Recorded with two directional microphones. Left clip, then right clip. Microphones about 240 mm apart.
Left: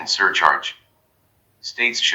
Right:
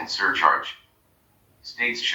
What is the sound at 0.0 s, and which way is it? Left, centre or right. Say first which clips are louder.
Speech: left 5 dB; left.